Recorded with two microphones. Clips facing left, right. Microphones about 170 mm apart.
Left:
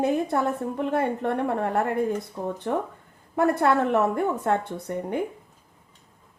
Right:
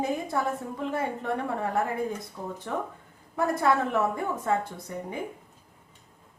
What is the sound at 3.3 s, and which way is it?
A woman's voice, 65° left (ahead or behind).